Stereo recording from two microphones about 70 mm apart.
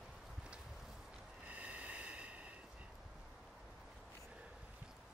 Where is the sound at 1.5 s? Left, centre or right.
Centre.